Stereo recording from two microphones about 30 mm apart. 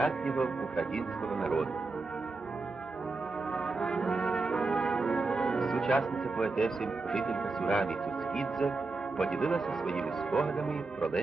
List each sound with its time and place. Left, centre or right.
0.0 s speech: centre
3.8 s brass instrument: centre
6.4 s speech: centre